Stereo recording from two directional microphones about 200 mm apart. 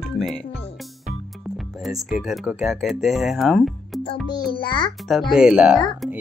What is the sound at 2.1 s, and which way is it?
Speech, centre (ahead or behind).